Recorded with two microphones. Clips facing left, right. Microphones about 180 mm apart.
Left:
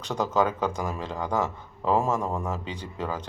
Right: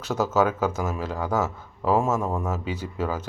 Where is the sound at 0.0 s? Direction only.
5° right (ahead or behind).